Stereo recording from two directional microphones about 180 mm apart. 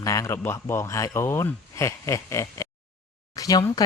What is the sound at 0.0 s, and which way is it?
Speech, 15° left (ahead or behind).